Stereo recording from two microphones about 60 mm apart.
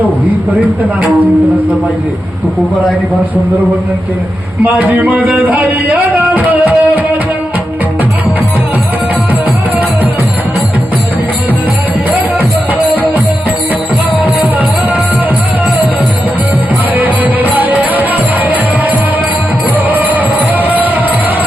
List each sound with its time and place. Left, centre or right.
4.6 s music: right
17.0 s music: right